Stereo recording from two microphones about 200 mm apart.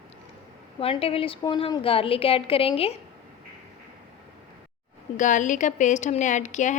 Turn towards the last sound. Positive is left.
turn(degrees=40)  # may be behind; listen again after turning